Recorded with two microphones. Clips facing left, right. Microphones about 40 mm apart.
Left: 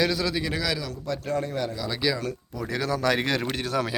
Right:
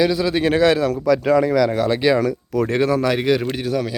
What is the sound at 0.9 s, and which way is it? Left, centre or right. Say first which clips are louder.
Speech: right 13 dB; right.